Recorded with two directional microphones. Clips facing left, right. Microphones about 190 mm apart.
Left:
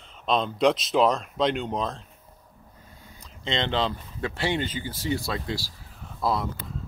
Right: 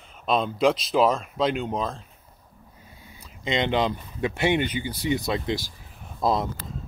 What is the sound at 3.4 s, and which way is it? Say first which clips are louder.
Speech: right 3 dB; 15° right (ahead or behind).